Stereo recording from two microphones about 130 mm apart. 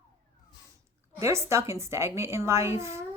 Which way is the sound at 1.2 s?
20° right (ahead or behind).